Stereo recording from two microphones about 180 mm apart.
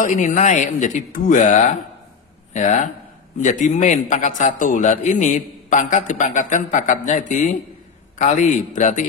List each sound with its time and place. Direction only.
0.0 s a man's voice: 45° left (ahead or behind)